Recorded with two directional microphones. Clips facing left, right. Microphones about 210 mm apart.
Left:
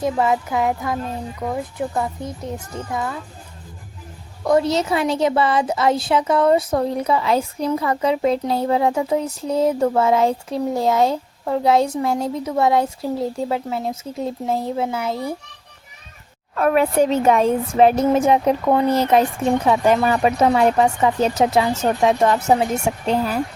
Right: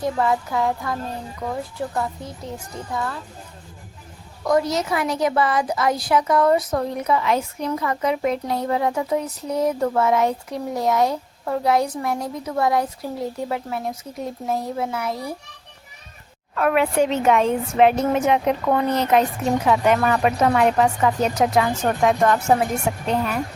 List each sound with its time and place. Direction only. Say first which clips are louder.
0.0 s a woman's voice: left 2 dB; 20° left (ahead or behind)
4.4 s a woman's voice: left 3 dB; 30° left (ahead or behind)
16.6 s a woman's voice: left 2 dB; 35° left (ahead or behind)
18.6 s a child's voice: left 3 dB; 15° left (ahead or behind)
19.6 s a woman's voice: left 1 dB; 30° left (ahead or behind)